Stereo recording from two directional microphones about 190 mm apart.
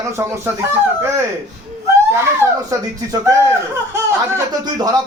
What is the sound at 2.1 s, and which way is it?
Speech, 15° right (ahead or behind).